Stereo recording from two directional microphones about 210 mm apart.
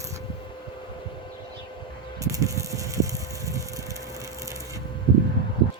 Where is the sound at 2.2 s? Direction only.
15° right (ahead or behind).